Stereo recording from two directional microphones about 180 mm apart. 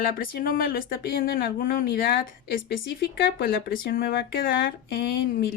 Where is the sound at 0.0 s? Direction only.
55° left (ahead or behind).